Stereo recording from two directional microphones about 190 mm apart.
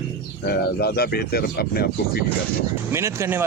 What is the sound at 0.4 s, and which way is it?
Speech, 55° left (ahead or behind).